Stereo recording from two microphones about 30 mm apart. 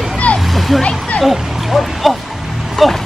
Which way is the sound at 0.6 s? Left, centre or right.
Centre.